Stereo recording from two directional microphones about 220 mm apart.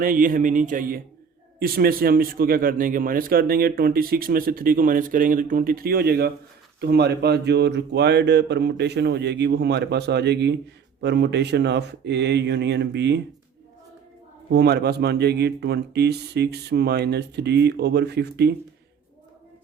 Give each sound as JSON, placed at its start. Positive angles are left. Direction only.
{"t": 0.0, "sound": "speech", "side_deg": -40}
{"t": 14.5, "sound": "speech", "side_deg": -45}